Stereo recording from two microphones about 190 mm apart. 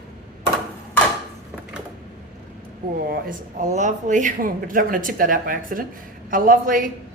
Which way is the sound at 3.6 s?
40° right (ahead or behind).